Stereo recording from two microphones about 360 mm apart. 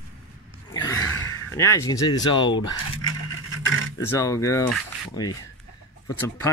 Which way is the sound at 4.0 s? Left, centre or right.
Centre.